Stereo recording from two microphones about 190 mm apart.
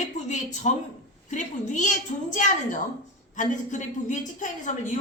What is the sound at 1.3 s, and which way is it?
A woman's voice, 40° left (ahead or behind).